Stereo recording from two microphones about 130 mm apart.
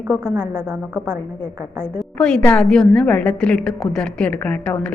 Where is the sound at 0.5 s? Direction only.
15° right (ahead or behind).